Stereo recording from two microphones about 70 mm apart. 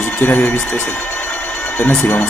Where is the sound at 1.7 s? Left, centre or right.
Left.